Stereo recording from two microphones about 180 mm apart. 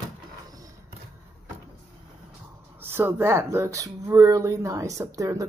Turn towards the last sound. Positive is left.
turn(degrees=-20)  # may be behind; listen again after turning